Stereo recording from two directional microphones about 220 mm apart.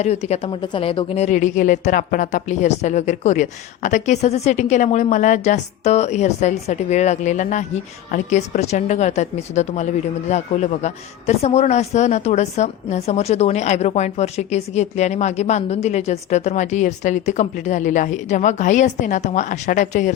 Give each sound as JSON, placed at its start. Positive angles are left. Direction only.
{"t": 0.0, "sound": "speech", "side_deg": 30}